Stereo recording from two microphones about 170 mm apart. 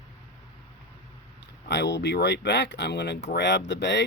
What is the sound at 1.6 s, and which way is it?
Speech, 85° left.